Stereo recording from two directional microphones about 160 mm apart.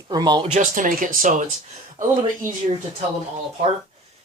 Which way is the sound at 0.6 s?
55° right (ahead or behind).